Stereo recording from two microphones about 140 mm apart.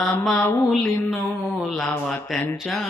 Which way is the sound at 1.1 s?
15° left (ahead or behind).